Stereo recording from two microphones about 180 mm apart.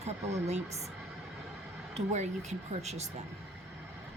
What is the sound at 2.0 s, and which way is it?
A woman's voice, 40° right (ahead or behind).